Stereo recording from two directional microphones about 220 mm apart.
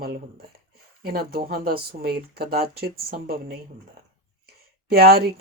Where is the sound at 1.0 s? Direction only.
45° right (ahead or behind).